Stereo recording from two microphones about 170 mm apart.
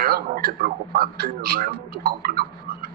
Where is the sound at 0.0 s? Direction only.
60° right (ahead or behind).